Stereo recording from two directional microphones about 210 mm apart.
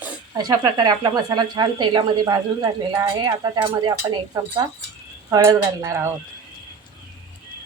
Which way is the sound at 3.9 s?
15° right (ahead or behind).